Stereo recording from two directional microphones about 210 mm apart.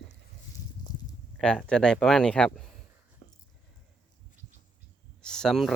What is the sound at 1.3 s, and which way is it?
Speech, 5° left (ahead or behind).